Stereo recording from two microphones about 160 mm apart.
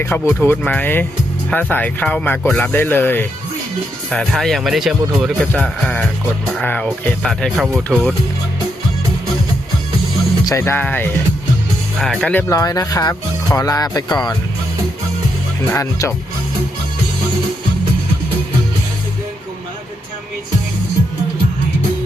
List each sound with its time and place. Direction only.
0.0 s speech: 15° left (ahead or behind)
4.1 s speech: centre (ahead or behind)
10.4 s speech: 15° left (ahead or behind)
12.5 s speech: 20° left (ahead or behind)
15.6 s speech: 15° left (ahead or behind)